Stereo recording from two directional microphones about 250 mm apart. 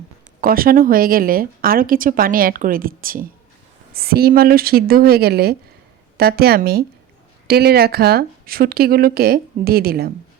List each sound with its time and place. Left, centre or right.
0.4 s speech: right